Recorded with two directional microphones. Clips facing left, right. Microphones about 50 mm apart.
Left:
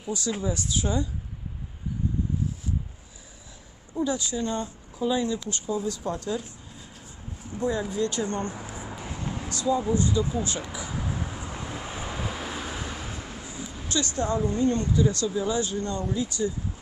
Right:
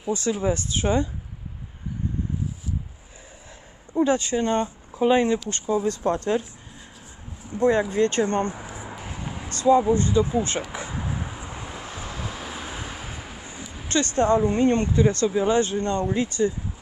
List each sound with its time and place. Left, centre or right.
0.0 s speech: right
3.9 s speech: right
7.5 s speech: centre
7.9 s speech: right
8.5 s a sound: centre
9.5 s speech: right
10.9 s vehicle: centre
11.7 s vehicle: centre
13.8 s speech: right